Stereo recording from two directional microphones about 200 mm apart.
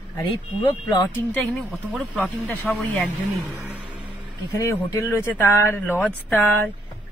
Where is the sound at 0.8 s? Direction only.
20° left (ahead or behind).